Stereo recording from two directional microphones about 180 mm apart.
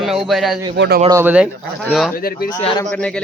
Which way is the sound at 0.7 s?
65° right (ahead or behind).